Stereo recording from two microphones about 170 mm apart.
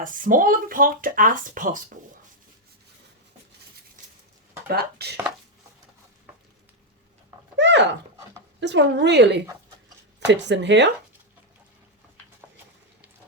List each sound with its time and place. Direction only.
0.0 s speech: 50° right (ahead or behind)
4.7 s speech: 70° right (ahead or behind)
7.5 s a sound: 90° right
8.6 s speech: 90° right